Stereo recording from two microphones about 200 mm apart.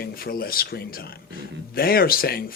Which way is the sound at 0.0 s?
50° left (ahead or behind).